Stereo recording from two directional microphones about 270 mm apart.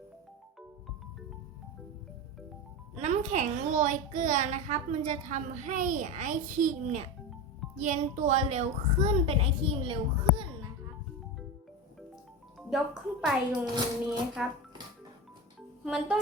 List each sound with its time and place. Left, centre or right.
2.9 s a child's voice: right
12.5 s a woman's voice: centre
15.8 s speech: centre